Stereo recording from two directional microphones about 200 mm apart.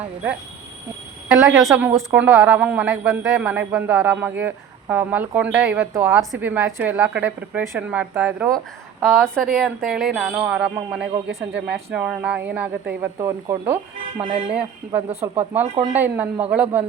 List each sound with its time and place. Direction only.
1.3 s a woman's voice: 5° right (ahead or behind)
14.2 s speech: 30° right (ahead or behind)
14.5 s a woman's voice: 5° right (ahead or behind)